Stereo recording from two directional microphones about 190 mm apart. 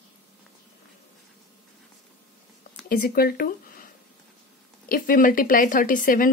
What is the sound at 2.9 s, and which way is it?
Speech, 50° left (ahead or behind).